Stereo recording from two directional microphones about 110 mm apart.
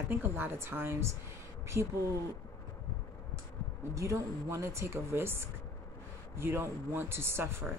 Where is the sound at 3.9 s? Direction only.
30° right (ahead or behind).